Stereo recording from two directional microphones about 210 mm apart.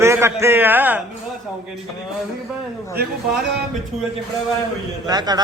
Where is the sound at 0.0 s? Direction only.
10° right (ahead or behind).